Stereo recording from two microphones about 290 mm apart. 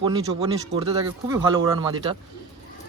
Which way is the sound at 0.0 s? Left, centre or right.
Centre.